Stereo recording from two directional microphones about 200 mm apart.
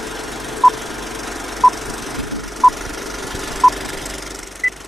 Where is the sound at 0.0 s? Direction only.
Centre (ahead or behind).